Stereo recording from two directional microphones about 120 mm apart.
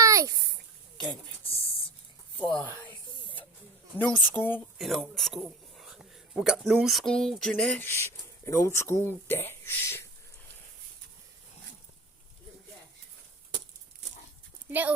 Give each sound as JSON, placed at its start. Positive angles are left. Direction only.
{"t": 0.0, "sound": "a sound", "side_deg": -25}
{"t": 2.4, "sound": "a woman's voice", "side_deg": 10}
{"t": 3.9, "sound": "a woman's voice", "side_deg": 15}
{"t": 4.8, "sound": "speech", "side_deg": 0}
{"t": 14.7, "sound": "speech", "side_deg": -15}